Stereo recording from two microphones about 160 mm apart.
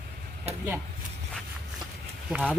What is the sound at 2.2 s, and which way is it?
Speech, centre (ahead or behind).